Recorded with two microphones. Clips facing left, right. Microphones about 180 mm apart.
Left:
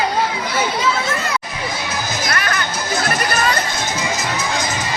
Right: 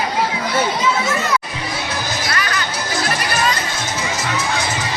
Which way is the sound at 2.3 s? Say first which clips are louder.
Left 2 dB; 50° left (ahead or behind).